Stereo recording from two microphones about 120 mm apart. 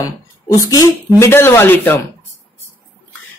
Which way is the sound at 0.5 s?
30° left (ahead or behind).